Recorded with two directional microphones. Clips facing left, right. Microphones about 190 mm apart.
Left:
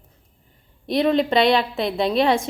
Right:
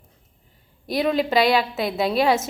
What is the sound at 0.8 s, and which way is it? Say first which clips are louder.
A woman's voice: left 3 dB; 5° right (ahead or behind).